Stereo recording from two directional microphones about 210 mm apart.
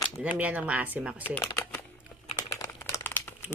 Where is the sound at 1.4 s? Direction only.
10° left (ahead or behind).